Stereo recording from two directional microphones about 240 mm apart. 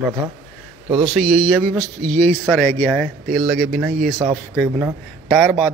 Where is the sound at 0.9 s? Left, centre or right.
Right.